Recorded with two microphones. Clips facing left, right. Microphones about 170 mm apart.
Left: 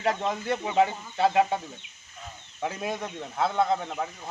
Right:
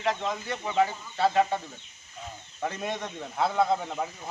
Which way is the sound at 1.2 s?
15° left (ahead or behind).